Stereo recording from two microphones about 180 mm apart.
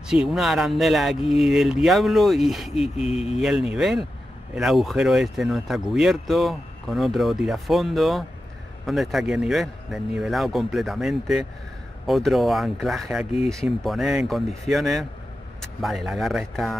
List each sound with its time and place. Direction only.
0.1 s speech: 5° right (ahead or behind)
3.1 s speech: 35° left (ahead or behind)
3.3 s speech: 5° right (ahead or behind)